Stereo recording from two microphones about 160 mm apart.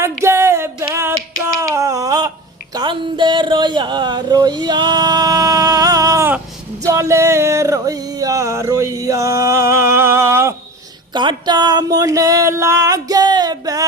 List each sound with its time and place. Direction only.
0.0 s music: 15° right (ahead or behind)
1.7 s a sound: 20° right (ahead or behind)
2.7 s speech: 30° right (ahead or behind)
6.8 s singing: 20° right (ahead or behind)
11.1 s speech: 30° right (ahead or behind)